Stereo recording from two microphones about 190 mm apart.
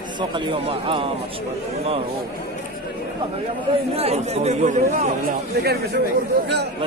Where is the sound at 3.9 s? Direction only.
30° right (ahead or behind).